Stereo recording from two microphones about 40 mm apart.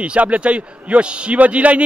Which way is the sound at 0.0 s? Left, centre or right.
Right.